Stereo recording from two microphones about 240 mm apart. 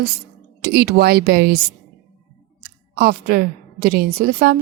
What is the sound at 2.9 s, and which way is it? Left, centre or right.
A woman's voice, right.